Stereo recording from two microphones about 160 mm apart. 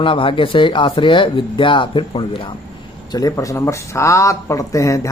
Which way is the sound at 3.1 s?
20° left (ahead or behind).